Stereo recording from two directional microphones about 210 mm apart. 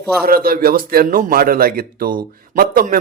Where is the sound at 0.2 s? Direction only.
45° right (ahead or behind).